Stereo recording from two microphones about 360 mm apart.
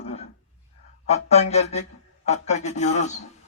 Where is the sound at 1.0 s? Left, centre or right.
Centre.